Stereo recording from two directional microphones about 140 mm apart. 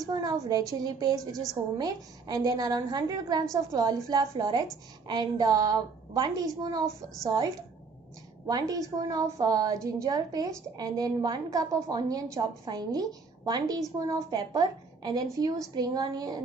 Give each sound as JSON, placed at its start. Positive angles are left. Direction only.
{"t": 0.0, "sound": "a woman's voice", "side_deg": -25}
{"t": 8.4, "sound": "a woman's voice", "side_deg": -25}